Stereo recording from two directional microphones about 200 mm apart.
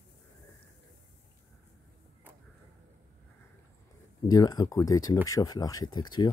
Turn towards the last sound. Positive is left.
turn(degrees=20)  # may be behind; listen again after turning